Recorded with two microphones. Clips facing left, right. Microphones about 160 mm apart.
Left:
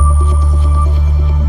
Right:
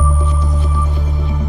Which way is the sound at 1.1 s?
Centre (ahead or behind).